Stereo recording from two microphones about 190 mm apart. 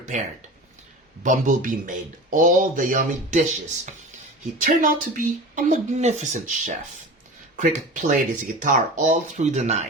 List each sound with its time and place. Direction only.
0.0 s speech: 40° right (ahead or behind)
4.5 s speech: 45° right (ahead or behind)